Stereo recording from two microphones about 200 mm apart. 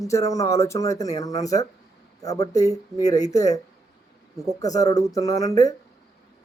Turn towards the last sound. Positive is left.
turn(degrees=15)  # may be behind; listen again after turning